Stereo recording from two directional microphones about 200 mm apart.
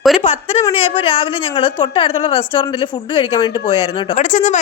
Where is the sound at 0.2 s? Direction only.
30° left (ahead or behind).